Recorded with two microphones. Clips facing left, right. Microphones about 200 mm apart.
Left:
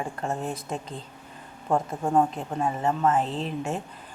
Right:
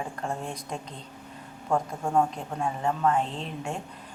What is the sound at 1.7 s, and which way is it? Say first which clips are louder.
Speech: left 2 dB; 15° left (ahead or behind).